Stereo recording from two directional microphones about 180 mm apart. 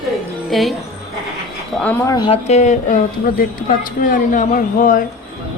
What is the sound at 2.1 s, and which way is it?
Speech, 25° left (ahead or behind).